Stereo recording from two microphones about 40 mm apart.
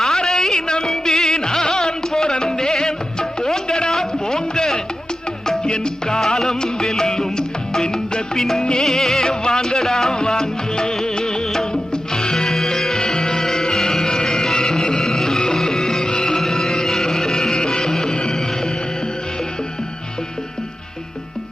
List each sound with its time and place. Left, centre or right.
0.0 s music: centre